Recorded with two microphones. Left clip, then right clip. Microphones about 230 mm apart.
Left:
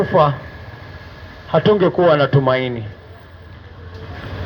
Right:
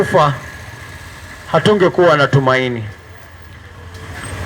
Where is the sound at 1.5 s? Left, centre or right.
Right.